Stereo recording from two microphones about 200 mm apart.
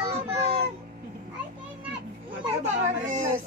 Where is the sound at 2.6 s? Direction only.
35° right (ahead or behind).